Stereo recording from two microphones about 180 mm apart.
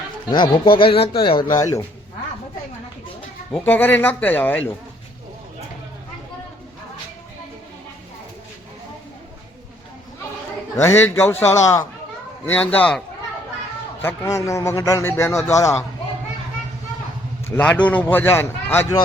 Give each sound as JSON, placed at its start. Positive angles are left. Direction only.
{"t": 0.3, "sound": "speech", "side_deg": 25}
{"t": 1.5, "sound": "speech", "side_deg": 20}
{"t": 3.5, "sound": "a man's voice", "side_deg": 10}
{"t": 10.8, "sound": "a man's voice", "side_deg": 10}
{"t": 14.0, "sound": "a man's voice", "side_deg": 15}
{"t": 17.4, "sound": "a man's voice", "side_deg": 10}